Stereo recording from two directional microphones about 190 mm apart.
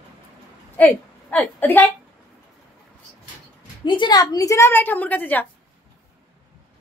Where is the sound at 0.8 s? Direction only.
10° left (ahead or behind).